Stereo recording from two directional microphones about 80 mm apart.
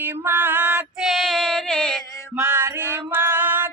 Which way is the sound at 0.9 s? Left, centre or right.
Centre.